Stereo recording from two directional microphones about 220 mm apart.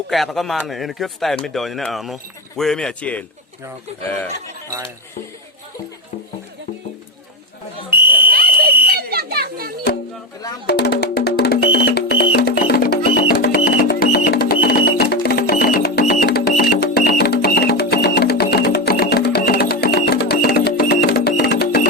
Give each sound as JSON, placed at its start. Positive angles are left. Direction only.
{"t": 0.1, "sound": "speech", "side_deg": 0}
{"t": 8.3, "sound": "fire alarm", "side_deg": -40}
{"t": 8.9, "sound": "children playing", "side_deg": -45}
{"t": 10.7, "sound": "music", "side_deg": 45}